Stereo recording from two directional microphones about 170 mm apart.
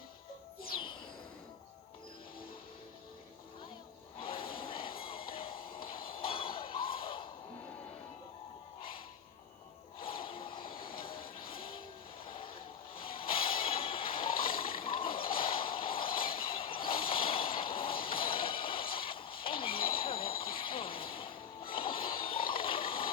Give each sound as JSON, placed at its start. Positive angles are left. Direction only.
{"t": 4.2, "sound": "a sound", "side_deg": 35}
{"t": 4.9, "sound": "music", "side_deg": 30}
{"t": 10.0, "sound": "vehicle", "side_deg": 30}
{"t": 11.0, "sound": "music", "side_deg": 30}
{"t": 12.2, "sound": "vehicle", "side_deg": 30}
{"t": 13.1, "sound": "a sound", "side_deg": 35}